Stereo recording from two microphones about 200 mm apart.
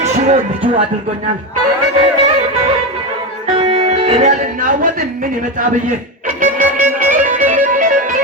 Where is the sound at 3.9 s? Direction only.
35° right (ahead or behind).